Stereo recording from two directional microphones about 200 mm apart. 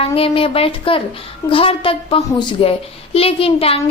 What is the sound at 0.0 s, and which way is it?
A child's voice, 30° left (ahead or behind).